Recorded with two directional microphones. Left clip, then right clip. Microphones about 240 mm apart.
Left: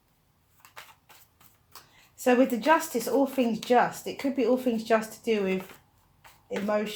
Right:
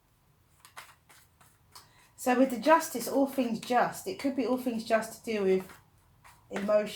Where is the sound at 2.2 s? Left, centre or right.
Left.